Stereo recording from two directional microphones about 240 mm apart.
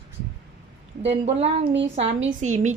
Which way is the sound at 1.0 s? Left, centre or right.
Right.